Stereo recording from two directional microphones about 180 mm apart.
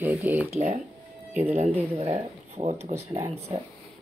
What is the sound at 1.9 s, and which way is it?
Speech, 35° right (ahead or behind).